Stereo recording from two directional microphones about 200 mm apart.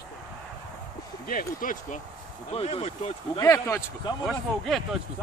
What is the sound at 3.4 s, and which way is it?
Speech, 15° left (ahead or behind).